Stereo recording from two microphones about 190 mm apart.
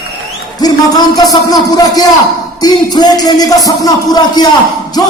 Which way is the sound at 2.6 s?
20° left (ahead or behind).